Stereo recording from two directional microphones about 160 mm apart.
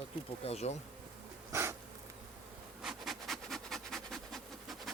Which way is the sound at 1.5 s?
15° right (ahead or behind).